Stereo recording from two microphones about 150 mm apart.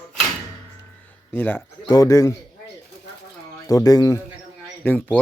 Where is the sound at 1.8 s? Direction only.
25° left (ahead or behind).